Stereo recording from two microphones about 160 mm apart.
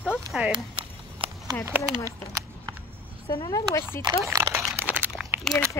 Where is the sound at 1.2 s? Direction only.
35° right (ahead or behind).